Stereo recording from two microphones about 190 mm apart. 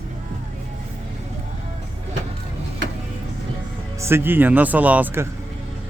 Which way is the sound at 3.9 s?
15° right (ahead or behind).